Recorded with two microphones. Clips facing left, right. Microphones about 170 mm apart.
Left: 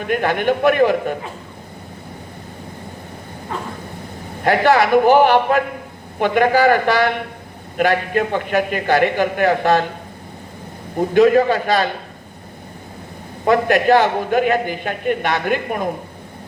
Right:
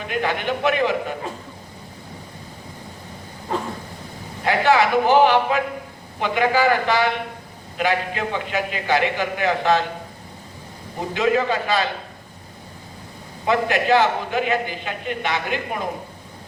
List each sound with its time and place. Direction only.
0.1 s a man's voice: 55° left (ahead or behind)
4.4 s a man's voice: 45° left (ahead or behind)
11.1 s a man's voice: 50° left (ahead or behind)
13.4 s a man's voice: 50° left (ahead or behind)